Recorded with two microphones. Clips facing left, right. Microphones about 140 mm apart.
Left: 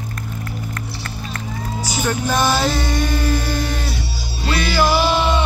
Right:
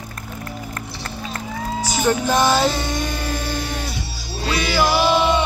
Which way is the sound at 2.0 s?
20° right (ahead or behind).